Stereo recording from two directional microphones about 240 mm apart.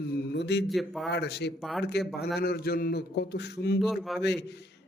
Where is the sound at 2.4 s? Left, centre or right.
Left.